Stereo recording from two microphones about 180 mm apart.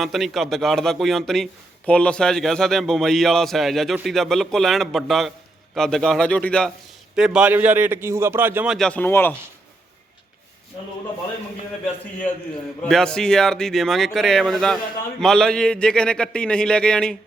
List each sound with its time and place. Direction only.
0.0 s a man's voice: centre (ahead or behind)
7.2 s a man's voice: 5° right (ahead or behind); by 9.3 s 10° left (ahead or behind)
12.8 s a man's voice: 5° left (ahead or behind)